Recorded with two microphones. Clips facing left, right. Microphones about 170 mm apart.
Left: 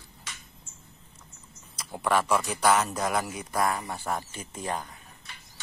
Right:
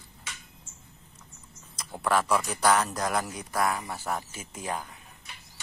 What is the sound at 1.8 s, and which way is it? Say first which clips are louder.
A man's voice: left 1 dB; centre (ahead or behind).